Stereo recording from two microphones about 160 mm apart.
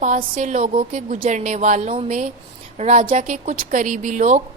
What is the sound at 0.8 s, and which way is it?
A woman's voice, 55° right (ahead or behind).